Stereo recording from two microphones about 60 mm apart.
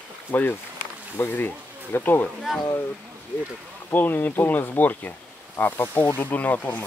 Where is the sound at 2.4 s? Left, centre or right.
Centre.